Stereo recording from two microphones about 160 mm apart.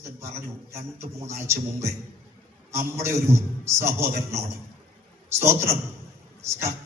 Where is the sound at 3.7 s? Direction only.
15° right (ahead or behind).